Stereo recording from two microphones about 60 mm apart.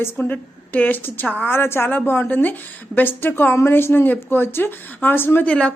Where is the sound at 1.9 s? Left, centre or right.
Left.